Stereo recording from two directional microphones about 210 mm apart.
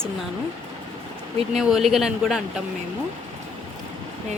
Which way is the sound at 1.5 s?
Centre (ahead or behind).